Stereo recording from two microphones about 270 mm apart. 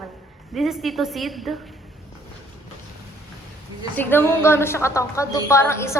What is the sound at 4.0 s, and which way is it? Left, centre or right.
A woman's voice, centre.